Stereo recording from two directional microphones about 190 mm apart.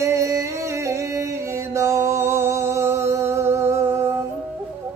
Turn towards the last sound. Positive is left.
turn(degrees=-15)  # may be behind; listen again after turning